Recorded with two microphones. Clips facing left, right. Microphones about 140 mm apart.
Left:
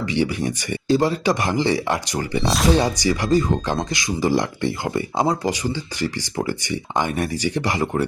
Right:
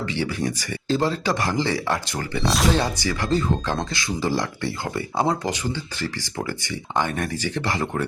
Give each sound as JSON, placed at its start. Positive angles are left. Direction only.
{"t": 0.1, "sound": "speech", "side_deg": 15}
{"t": 2.4, "sound": "speech", "side_deg": 0}
{"t": 2.7, "sound": "speech", "side_deg": 15}